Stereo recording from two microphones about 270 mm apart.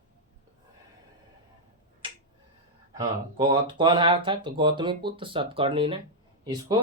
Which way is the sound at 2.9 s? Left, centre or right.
Centre.